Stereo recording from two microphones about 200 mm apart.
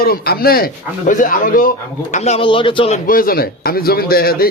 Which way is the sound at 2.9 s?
45° left (ahead or behind).